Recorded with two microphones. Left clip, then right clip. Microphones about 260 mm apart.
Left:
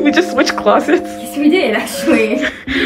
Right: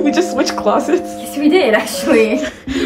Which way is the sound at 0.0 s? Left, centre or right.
Centre.